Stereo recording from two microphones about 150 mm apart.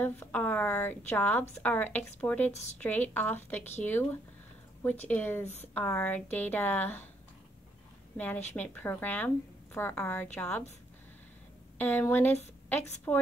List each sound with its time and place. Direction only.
0.0 s a woman's voice: 10° left (ahead or behind)
2.5 s speech: 50° left (ahead or behind)
2.8 s a woman's voice: 10° left (ahead or behind)
8.5 s a woman's voice: 10° left (ahead or behind)
11.8 s a woman's voice: 10° left (ahead or behind)